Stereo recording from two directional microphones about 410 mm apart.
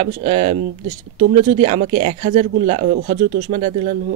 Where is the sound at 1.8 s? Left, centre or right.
Centre.